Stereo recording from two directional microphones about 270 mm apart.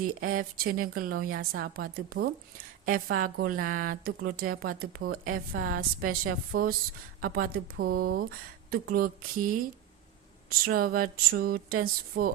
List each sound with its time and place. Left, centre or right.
0.2 s a woman's voice: right
10.6 s a woman's voice: right